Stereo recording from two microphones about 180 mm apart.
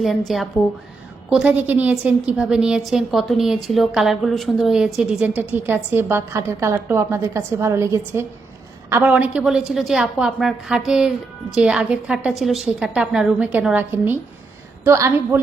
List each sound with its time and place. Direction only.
0.3 s a woman's voice: centre (ahead or behind)